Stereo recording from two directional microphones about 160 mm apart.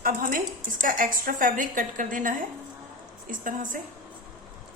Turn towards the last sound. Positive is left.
turn(degrees=-55)  # may be behind; listen again after turning